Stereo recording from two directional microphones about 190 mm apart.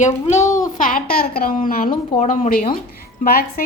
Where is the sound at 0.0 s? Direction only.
35° left (ahead or behind).